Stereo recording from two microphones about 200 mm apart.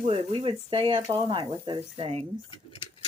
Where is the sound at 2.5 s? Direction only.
25° left (ahead or behind).